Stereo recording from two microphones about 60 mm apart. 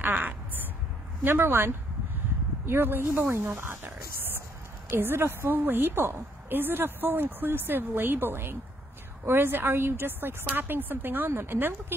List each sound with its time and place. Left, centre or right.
0.0 s a sound: right
1.2 s a woman's voice: right
4.9 s a woman's voice: right